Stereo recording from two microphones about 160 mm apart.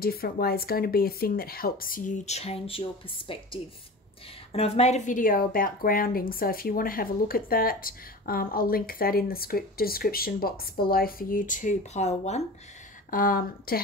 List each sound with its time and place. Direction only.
0.0 s a woman's voice: 70° left (ahead or behind); by 12.4 s 45° left (ahead or behind)
13.1 s a woman's voice: 65° left (ahead or behind)